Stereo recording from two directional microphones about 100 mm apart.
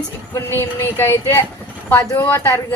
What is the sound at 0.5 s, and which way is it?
A woman's voice, 25° left (ahead or behind).